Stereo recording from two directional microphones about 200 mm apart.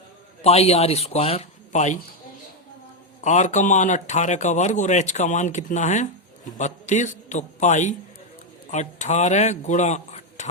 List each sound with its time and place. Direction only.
0.4 s speech: 30° left (ahead or behind)
3.2 s a man's voice: 35° left (ahead or behind)